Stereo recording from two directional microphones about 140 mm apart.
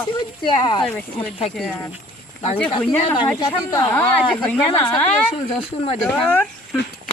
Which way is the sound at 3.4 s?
30° left (ahead or behind).